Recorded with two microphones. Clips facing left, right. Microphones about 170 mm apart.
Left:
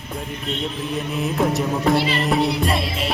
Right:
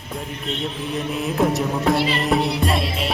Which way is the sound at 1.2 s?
Centre (ahead or behind).